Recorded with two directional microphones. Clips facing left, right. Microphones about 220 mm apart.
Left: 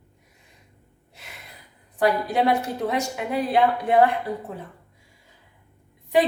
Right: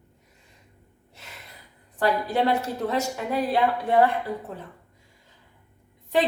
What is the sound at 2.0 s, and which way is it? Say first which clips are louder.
A woman's voice: left 2 dB; 15° left (ahead or behind).